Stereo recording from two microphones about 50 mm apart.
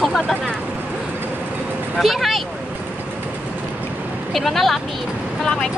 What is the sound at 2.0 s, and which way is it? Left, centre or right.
Speech, centre.